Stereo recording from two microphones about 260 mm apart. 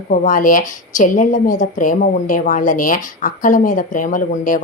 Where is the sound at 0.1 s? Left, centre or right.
Left.